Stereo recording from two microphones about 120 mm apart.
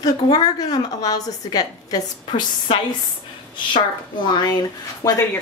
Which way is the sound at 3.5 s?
40° left (ahead or behind).